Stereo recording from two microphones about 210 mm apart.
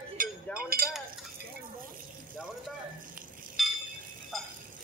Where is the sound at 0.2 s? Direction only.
40° right (ahead or behind).